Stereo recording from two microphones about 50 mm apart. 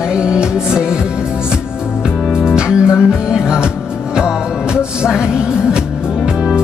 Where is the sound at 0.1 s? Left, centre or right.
Centre.